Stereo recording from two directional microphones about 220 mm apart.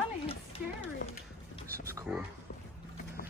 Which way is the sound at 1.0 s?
35° left (ahead or behind).